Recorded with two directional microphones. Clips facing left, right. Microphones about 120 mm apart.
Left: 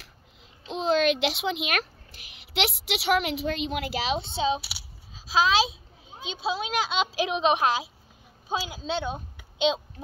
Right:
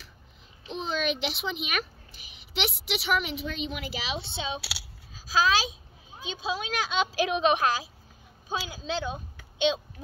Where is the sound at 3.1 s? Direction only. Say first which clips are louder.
Left 4 dB; 65° left (ahead or behind); by 4.5 s 40° left (ahead or behind).